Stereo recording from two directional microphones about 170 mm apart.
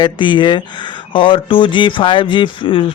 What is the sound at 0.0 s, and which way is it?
Speech, 30° left (ahead or behind).